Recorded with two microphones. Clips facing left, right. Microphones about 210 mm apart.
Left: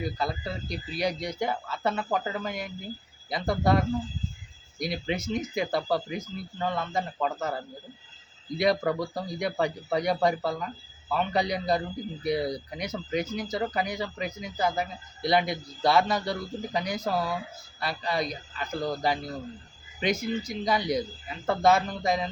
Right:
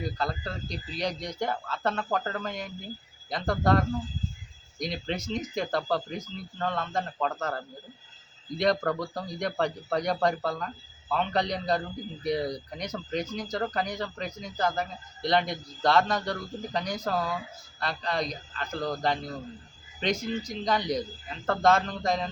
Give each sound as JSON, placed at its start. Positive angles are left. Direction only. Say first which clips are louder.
{"t": 0.0, "sound": "a man's voice", "louder": "left 1 dB", "side_deg": 10}